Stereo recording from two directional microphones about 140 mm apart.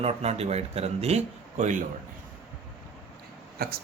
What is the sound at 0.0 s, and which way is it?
A man's voice, 50° right (ahead or behind).